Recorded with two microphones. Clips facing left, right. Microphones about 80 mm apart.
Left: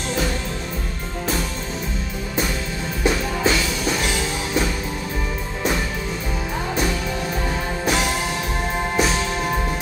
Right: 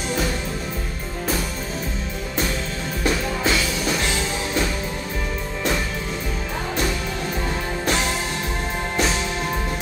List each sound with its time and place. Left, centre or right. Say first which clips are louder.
3.0 s music: left 2 dB; centre
7.8 s music: left 2 dB; centre